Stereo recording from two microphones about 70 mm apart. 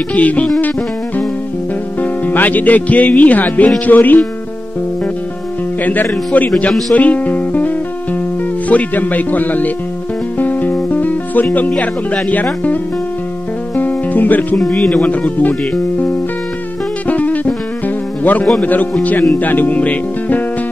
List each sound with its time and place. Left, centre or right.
0.1 s speech: left
2.0 s speech: left
6.9 s speech: left
10.4 s music: left
11.5 s speech: left
13.7 s music: left
14.7 s speech: centre
17.1 s music: left
18.6 s speech: left